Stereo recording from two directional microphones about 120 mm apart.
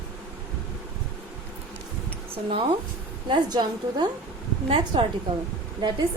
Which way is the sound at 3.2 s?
35° right (ahead or behind).